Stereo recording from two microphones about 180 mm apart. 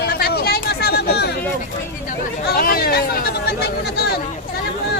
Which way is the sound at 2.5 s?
55° left (ahead or behind).